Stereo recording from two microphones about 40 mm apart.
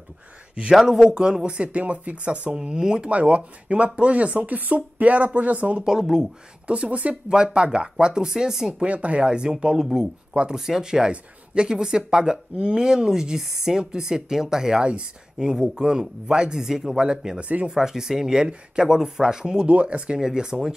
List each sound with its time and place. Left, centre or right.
0.8 s speech: centre; by 2.5 s right
2.5 s speech: right
3.1 s speech: right
5.9 s speech: centre
6.7 s speech: right
7.2 s speech: centre
8.8 s speech: right
10.5 s speech: centre
17.4 s speech: right
17.6 s speech: centre
19.7 s speech: right; by 20.7 s centre